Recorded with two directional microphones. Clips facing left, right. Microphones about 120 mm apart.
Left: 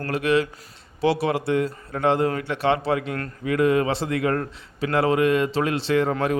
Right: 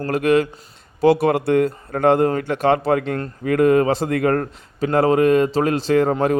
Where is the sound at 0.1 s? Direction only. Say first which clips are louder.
Right 4 dB; 45° right (ahead or behind).